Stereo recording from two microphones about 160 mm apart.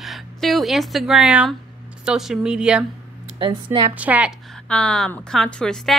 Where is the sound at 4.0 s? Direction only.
10° right (ahead or behind).